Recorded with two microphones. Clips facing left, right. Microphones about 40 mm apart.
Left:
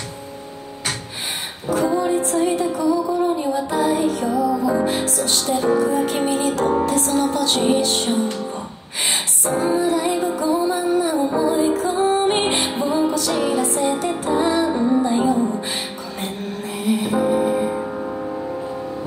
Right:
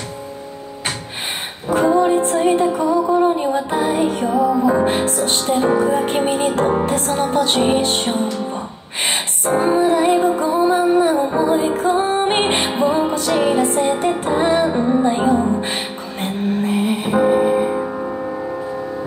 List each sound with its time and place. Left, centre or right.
1.7 s music: right